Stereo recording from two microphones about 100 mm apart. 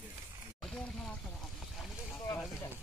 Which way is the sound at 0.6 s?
10° left (ahead or behind).